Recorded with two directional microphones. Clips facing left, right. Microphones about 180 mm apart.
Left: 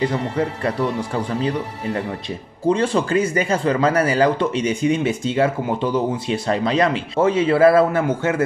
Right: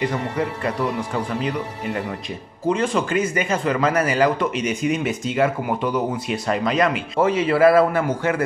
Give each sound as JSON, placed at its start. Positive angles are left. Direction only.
{"t": 2.7, "sound": "speech", "side_deg": 30}